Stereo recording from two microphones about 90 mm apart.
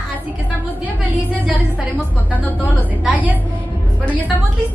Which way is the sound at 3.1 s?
20° right (ahead or behind).